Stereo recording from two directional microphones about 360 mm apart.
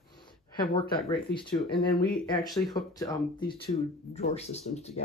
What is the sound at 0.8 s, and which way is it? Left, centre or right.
Speech, centre.